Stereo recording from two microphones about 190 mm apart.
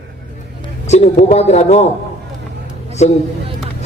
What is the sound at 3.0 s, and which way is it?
Speech, 35° left (ahead or behind).